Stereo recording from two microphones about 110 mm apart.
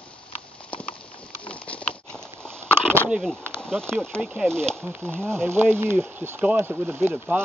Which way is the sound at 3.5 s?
5° left (ahead or behind).